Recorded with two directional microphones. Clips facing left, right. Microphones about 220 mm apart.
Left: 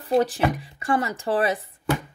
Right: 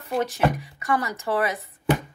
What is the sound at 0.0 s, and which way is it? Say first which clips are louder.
Speech: left 3 dB; 35° left (ahead or behind).